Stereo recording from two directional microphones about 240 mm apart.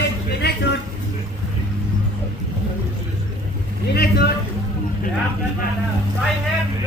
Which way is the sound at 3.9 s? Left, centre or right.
Left.